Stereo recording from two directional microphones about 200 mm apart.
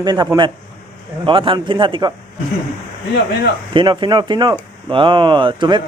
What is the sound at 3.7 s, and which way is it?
Speech, 25° right (ahead or behind).